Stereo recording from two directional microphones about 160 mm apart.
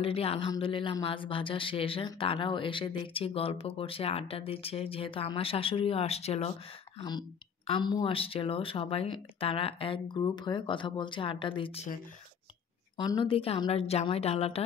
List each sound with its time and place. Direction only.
0.0 s speech: 35° left (ahead or behind)
7.0 s speech: 25° left (ahead or behind)
12.9 s speech: 30° left (ahead or behind)